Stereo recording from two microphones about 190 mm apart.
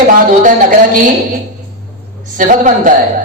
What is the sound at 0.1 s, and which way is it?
A man's voice, 45° right (ahead or behind).